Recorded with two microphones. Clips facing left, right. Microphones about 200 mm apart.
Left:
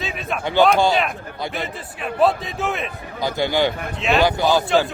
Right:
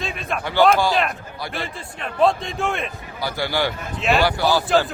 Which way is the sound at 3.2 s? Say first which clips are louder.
Left 4 dB; 20° left (ahead or behind).